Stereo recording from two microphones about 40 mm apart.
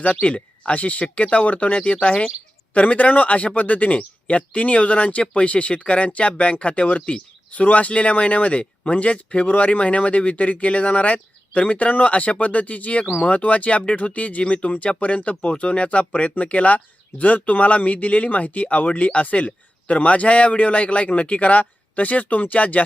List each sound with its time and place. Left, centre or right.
0.0 s speech: left